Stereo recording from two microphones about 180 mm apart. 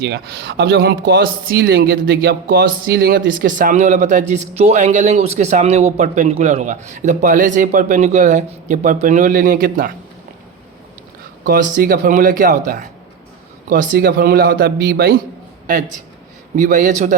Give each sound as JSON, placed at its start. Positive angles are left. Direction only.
{"t": 0.1, "sound": "speech", "side_deg": -65}
{"t": 11.4, "sound": "a man's voice", "side_deg": -55}
{"t": 16.6, "sound": "speech", "side_deg": -45}